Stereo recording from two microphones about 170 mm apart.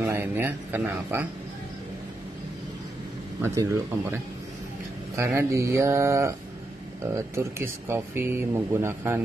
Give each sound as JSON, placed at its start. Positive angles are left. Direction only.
{"t": 0.0, "sound": "speech", "side_deg": -15}
{"t": 3.4, "sound": "speech", "side_deg": -15}